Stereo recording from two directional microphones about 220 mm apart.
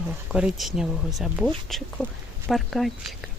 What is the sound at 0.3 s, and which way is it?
Speech, 5° right (ahead or behind).